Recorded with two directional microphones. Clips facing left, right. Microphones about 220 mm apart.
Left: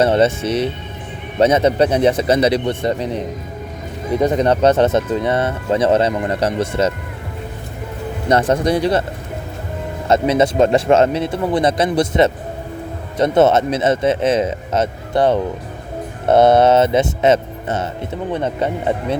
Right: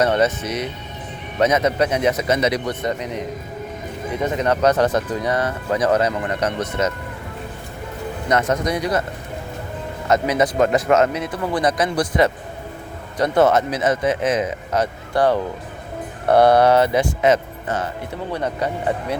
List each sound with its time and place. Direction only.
0.0 s speech: 30° left (ahead or behind)
4.2 s speech: 30° left (ahead or behind)
8.3 s speech: 30° left (ahead or behind)
10.1 s speech: 25° left (ahead or behind)